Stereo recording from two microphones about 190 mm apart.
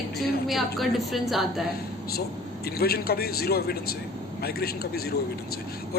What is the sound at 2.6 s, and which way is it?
Speech, 55° left (ahead or behind).